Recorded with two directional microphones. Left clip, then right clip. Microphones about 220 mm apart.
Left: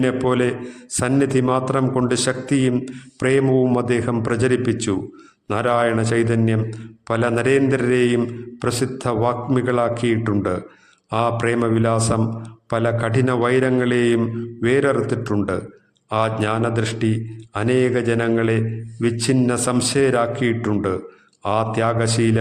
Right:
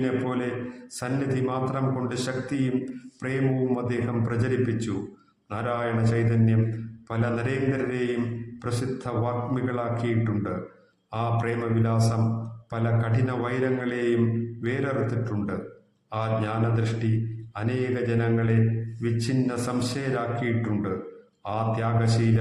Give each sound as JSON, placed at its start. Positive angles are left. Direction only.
{"t": 0.0, "sound": "a man's voice", "side_deg": 40}